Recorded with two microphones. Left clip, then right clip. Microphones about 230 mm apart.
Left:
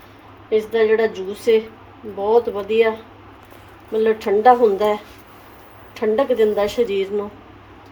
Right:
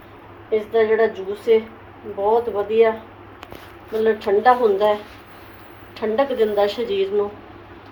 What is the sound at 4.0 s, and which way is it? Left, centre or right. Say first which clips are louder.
A woman's voice: left 1 dB; left.